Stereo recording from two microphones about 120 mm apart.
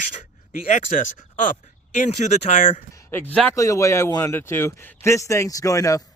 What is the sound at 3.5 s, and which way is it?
Speech, 25° left (ahead or behind).